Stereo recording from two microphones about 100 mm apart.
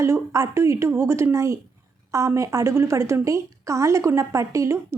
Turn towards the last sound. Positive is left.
turn(degrees=-30)  # may be behind; listen again after turning